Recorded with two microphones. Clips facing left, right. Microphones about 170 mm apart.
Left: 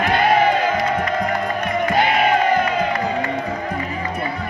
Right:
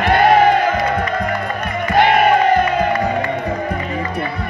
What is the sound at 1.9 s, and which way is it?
Music, 55° right (ahead or behind).